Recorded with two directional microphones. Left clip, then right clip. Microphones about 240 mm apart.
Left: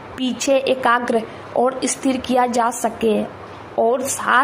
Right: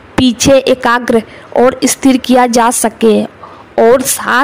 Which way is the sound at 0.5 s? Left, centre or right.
Right.